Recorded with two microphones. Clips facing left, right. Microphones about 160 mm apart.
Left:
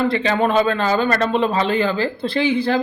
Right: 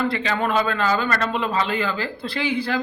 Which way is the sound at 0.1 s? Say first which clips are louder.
Left 5 dB; 25° left (ahead or behind).